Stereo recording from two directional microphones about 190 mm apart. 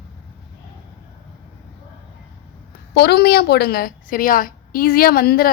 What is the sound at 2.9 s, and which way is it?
A woman's voice, 60° left (ahead or behind).